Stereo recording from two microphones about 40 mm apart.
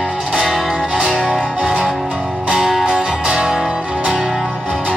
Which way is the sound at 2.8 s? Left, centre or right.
Right.